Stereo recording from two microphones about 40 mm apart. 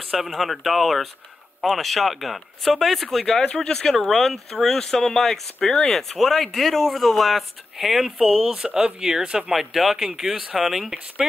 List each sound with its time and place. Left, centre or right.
0.0 s speech: centre
3.4 s speech: centre
8.4 s speech: centre
9.5 s speech: centre